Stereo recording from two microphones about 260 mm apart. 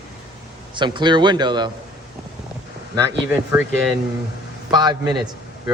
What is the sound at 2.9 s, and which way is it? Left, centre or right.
A man's voice, centre.